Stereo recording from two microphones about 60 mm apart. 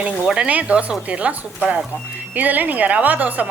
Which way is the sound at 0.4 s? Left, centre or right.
Right.